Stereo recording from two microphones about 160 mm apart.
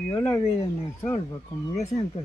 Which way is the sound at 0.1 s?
20° left (ahead or behind).